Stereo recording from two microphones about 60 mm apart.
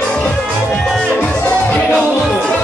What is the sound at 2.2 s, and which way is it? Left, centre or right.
Music, centre.